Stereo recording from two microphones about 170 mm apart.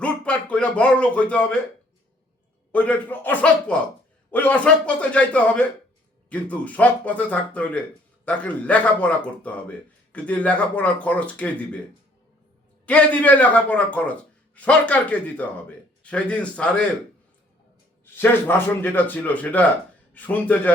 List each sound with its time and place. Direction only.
0.0 s speech: 5° left (ahead or behind)
2.7 s a man's voice: 10° left (ahead or behind)
12.8 s a man's voice: 10° left (ahead or behind)
18.0 s a man's voice: 10° left (ahead or behind)